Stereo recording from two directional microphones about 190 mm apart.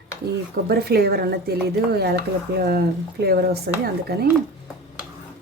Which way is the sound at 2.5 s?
60° right (ahead or behind).